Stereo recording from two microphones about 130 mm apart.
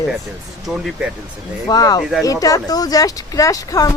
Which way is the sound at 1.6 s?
30° left (ahead or behind).